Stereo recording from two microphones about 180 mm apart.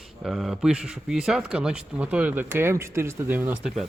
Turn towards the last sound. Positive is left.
turn(degrees=-5)  # may be behind; listen again after turning